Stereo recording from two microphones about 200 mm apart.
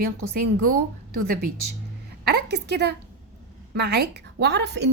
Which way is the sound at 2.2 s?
55° right (ahead or behind).